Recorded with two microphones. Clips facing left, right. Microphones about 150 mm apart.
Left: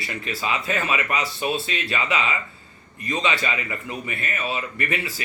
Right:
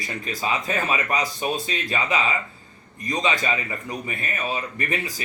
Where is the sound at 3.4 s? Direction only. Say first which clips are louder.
Right 1 dB; 35° right (ahead or behind).